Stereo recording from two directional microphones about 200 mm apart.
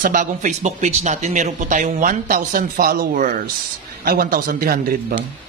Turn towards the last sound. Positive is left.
turn(degrees=-45)  # may be behind; listen again after turning